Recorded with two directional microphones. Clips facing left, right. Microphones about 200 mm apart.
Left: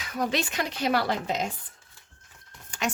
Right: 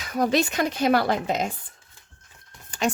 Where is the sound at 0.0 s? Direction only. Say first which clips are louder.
Right 6 dB; 40° right (ahead or behind).